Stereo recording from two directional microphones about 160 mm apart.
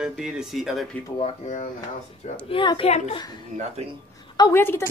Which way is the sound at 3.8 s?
45° right (ahead or behind).